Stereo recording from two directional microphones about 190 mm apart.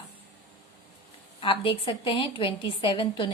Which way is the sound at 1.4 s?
25° left (ahead or behind).